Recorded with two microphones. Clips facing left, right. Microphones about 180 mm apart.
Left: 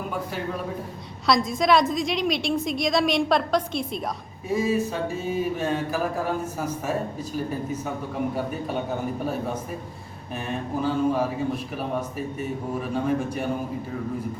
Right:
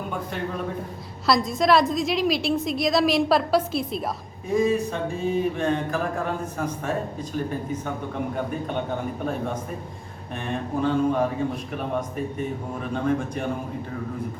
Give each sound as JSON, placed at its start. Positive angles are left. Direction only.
{"t": 0.1, "sound": "a woman's voice", "side_deg": 5}
{"t": 10.3, "sound": "a woman's voice", "side_deg": 5}